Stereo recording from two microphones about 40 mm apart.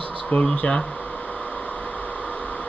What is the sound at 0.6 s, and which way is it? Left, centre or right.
Speech, left.